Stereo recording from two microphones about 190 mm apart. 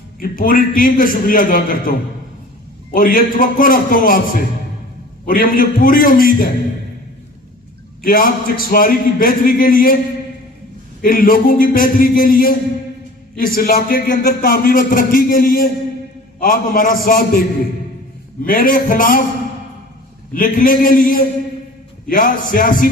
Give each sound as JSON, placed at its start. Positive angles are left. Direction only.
{"t": 0.2, "sound": "a man's voice", "side_deg": 45}
{"t": 5.2, "sound": "a man's voice", "side_deg": 45}
{"t": 8.0, "sound": "a man's voice", "side_deg": 45}
{"t": 11.0, "sound": "a man's voice", "side_deg": 45}
{"t": 18.4, "sound": "a man's voice", "side_deg": 45}
{"t": 20.3, "sound": "a man's voice", "side_deg": 45}